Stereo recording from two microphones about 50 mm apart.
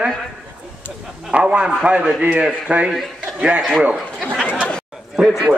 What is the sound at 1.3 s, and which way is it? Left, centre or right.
A man's voice, centre.